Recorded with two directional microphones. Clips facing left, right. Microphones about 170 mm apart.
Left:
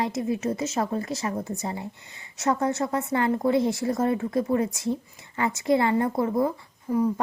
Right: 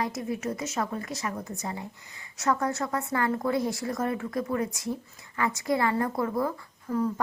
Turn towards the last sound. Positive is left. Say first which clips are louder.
# left 4 dB
turn(degrees=15)  # may be behind; listen again after turning